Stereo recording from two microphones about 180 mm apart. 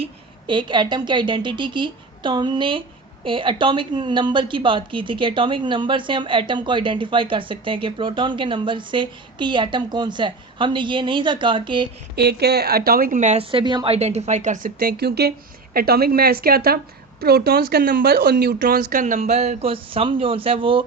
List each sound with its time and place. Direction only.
0.0 s a woman's voice: 25° right (ahead or behind)
12.1 s a woman's voice: 65° right (ahead or behind); by 20.8 s 30° right (ahead or behind)